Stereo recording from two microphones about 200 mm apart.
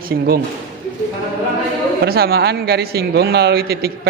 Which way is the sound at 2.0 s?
50° right (ahead or behind).